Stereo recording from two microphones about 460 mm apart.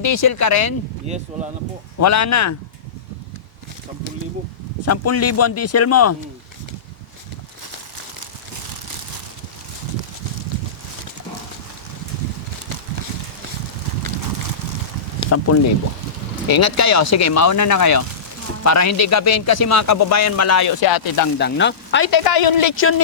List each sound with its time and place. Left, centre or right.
0.0 s speech: left
1.1 s speech: centre
2.0 s speech: left
4.9 s speech: left
15.3 s speech: left
21.3 s speech: left
22.1 s speech: left
22.7 s speech: left